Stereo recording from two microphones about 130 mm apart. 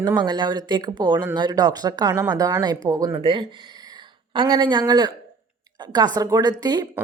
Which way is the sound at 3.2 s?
40° right (ahead or behind).